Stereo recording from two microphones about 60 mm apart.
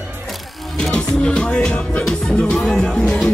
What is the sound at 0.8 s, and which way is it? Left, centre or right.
Music, centre.